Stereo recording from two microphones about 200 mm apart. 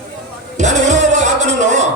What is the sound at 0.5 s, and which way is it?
Music, 35° right (ahead or behind).